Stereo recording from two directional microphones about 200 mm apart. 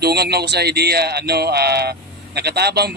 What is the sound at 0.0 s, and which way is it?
Speech, 55° right (ahead or behind).